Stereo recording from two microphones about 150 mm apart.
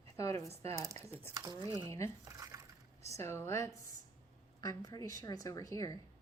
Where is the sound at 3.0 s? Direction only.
20° left (ahead or behind).